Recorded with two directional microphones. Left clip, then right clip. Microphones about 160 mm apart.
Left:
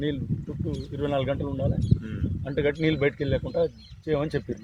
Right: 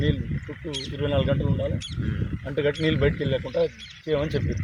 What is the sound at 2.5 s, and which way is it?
A man's voice, 25° left (ahead or behind).